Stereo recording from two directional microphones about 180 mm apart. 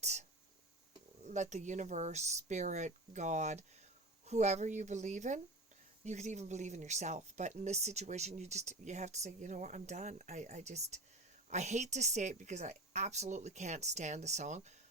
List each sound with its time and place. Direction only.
0.0 s speech: 40° right (ahead or behind)
1.3 s speech: 40° right (ahead or behind)